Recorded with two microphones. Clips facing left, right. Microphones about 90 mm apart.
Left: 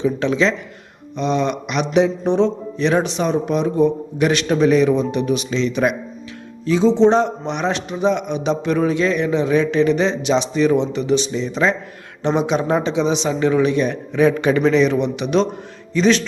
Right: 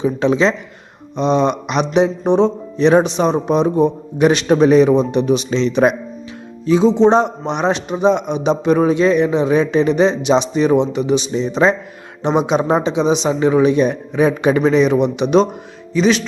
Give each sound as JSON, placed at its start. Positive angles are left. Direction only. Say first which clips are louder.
{"t": 0.0, "sound": "a man's voice", "louder": "right 3 dB", "side_deg": -20}
{"t": 6.7, "sound": "a man's voice", "louder": "right 2 dB", "side_deg": -15}
{"t": 15.9, "sound": "speech", "louder": "right 1 dB", "side_deg": -5}